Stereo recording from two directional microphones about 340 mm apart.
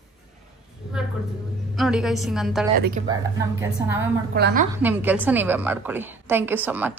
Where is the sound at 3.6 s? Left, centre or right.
Centre.